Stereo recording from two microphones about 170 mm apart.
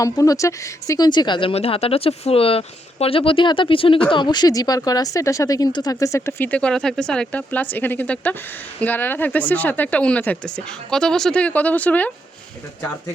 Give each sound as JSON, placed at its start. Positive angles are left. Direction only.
{"t": 0.0, "sound": "speech", "side_deg": 20}